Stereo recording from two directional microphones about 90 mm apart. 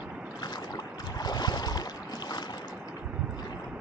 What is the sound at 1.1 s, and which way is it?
Boat, 50° left (ahead or behind).